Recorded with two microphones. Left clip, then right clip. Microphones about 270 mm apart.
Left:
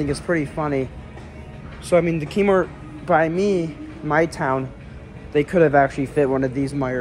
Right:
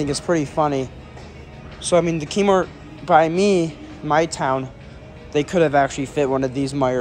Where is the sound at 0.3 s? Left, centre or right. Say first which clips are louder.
Right 4 dB; centre.